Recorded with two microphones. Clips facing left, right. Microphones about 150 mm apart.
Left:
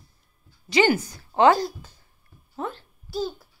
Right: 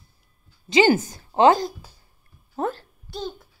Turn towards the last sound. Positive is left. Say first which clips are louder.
# left 3 dB
turn(degrees=5)  # may be behind; listen again after turning